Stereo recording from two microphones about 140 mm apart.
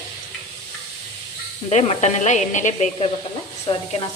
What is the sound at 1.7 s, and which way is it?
Speech, 55° left (ahead or behind).